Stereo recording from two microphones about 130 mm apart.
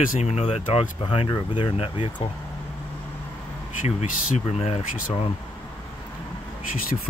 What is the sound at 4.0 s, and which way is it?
Speech, 55° left (ahead or behind).